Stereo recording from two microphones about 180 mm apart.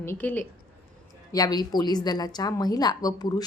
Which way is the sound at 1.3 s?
20° left (ahead or behind).